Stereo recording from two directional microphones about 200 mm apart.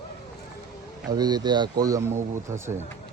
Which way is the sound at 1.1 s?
20° right (ahead or behind).